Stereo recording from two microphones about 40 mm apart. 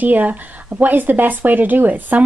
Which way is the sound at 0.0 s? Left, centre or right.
Right.